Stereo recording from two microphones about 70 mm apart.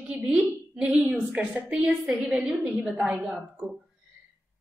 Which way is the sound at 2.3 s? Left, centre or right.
Centre.